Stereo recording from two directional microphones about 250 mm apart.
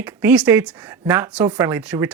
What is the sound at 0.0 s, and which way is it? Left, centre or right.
Speech, centre.